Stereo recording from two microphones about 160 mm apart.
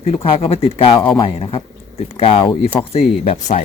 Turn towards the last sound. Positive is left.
turn(degrees=45)  # may be behind; listen again after turning